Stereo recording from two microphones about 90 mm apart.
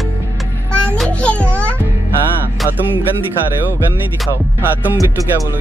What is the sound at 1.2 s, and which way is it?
Music, 15° left (ahead or behind).